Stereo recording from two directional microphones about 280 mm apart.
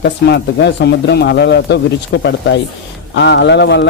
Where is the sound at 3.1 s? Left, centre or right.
Left.